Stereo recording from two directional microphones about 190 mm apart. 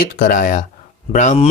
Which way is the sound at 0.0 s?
45° left (ahead or behind).